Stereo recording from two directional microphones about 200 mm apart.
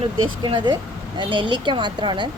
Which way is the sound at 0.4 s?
25° right (ahead or behind).